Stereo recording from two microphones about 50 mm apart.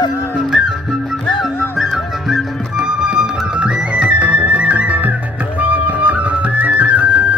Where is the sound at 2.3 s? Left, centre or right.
Centre.